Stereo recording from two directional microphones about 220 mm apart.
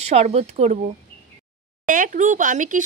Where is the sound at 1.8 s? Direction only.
35° right (ahead or behind).